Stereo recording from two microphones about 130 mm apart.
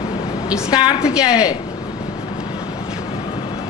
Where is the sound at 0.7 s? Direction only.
35° left (ahead or behind).